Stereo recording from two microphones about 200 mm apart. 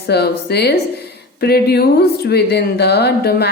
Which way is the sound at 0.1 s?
55° left (ahead or behind).